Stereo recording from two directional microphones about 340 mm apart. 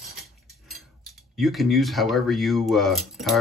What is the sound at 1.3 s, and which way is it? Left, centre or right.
Speech, centre.